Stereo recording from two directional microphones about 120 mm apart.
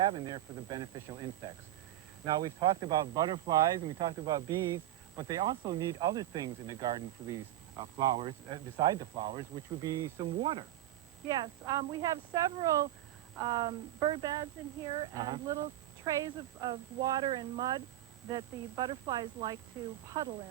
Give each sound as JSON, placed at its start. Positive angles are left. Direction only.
{"t": 0.1, "sound": "speech", "side_deg": -35}
{"t": 10.2, "sound": "speech", "side_deg": -40}
{"t": 15.1, "sound": "speech", "side_deg": -35}